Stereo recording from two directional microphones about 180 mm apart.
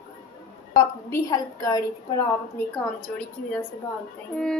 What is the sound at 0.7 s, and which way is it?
A woman's voice, 20° left (ahead or behind).